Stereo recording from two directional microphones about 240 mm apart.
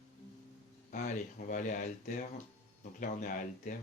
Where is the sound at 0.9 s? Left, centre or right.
Left.